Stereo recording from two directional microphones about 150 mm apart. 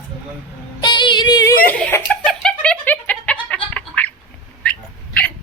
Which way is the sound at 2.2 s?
5° left (ahead or behind).